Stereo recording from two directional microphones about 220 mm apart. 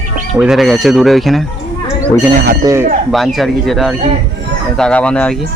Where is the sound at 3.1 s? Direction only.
Centre (ahead or behind).